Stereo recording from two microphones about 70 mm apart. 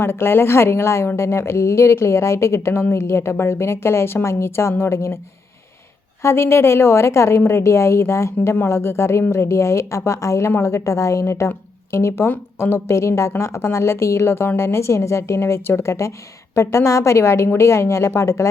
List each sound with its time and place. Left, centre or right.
0.0 s speech: left
6.2 s speech: left